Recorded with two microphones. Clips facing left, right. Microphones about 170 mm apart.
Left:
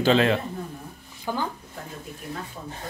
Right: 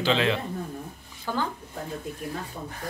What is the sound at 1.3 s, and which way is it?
Speech, 15° left (ahead or behind).